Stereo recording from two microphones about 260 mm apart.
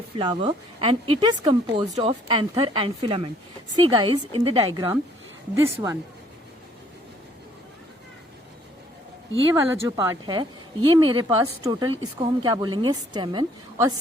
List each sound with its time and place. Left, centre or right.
0.2 s speech: centre
9.6 s speech: centre